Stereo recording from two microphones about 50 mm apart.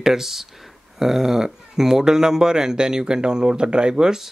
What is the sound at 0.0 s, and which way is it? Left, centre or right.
Speech, centre.